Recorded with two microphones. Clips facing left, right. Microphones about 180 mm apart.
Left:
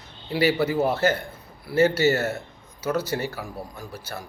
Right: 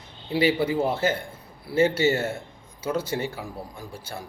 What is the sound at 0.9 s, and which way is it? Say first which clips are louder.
A man's voice: left 2 dB; 25° right (ahead or behind).